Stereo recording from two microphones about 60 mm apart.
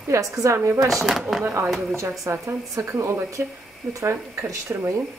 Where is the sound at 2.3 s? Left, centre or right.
Right.